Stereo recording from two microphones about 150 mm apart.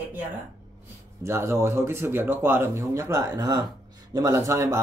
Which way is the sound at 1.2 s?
15° right (ahead or behind).